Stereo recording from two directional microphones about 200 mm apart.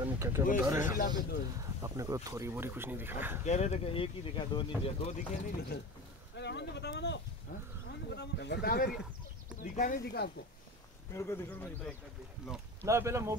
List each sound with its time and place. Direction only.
0.0 s speech: 15° right (ahead or behind)
0.8 s speech: 45° left (ahead or behind)
1.6 s speech: 15° right (ahead or behind)
3.4 s speech: 35° left (ahead or behind)
6.3 s speech: 60° left (ahead or behind)
11.1 s a man's voice: 10° left (ahead or behind)
12.8 s speech: 15° right (ahead or behind)